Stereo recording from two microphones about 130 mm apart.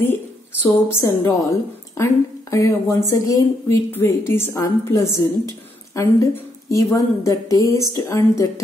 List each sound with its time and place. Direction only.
0.0 s a woman's voice: 15° left (ahead or behind)